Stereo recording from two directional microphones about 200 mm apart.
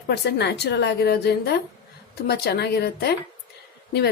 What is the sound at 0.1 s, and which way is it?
A woman's voice, 55° left (ahead or behind).